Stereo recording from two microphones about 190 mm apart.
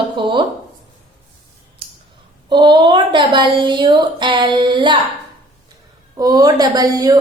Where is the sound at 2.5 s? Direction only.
25° right (ahead or behind).